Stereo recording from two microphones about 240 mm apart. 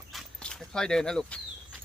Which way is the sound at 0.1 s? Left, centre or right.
Centre.